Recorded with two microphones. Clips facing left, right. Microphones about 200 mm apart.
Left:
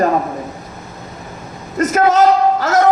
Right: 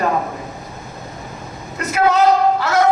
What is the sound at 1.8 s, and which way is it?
Speech, 45° left (ahead or behind).